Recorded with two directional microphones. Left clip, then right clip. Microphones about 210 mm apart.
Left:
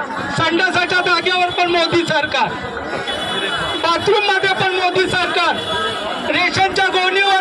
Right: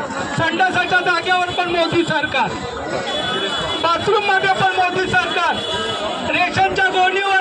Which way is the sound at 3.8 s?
25° left (ahead or behind).